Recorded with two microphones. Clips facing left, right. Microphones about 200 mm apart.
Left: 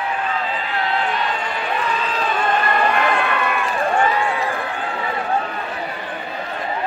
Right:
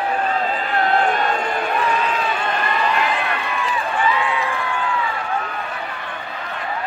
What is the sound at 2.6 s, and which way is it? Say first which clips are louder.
Run: left 2 dB; 55° left (ahead or behind).